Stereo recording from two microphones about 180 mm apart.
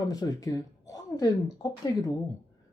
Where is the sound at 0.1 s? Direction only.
20° left (ahead or behind).